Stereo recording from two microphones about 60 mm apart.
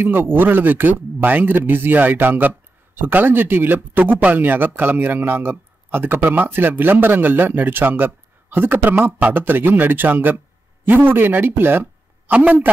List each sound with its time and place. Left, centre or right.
0.0 s a man's voice: right
12.3 s a man's voice: right